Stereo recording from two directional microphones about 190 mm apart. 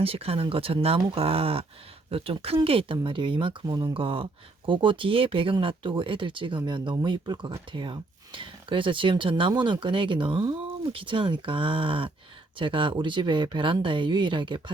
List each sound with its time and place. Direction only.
0.0 s speech: 30° right (ahead or behind)